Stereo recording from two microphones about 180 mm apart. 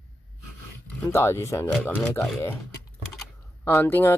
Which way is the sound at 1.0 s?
15° left (ahead or behind).